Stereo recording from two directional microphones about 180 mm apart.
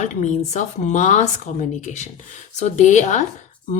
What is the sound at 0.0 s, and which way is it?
A woman's voice, 40° left (ahead or behind).